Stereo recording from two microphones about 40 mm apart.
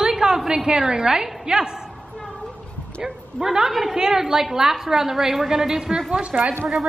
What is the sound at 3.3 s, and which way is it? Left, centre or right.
A woman's voice, centre.